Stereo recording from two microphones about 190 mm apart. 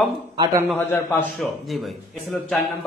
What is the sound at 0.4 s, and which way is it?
Speech, 15° right (ahead or behind).